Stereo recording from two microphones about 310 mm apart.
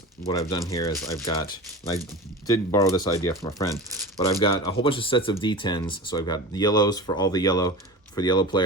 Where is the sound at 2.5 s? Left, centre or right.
Centre.